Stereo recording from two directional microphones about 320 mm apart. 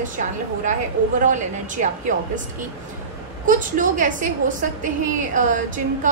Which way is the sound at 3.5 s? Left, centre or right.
Right.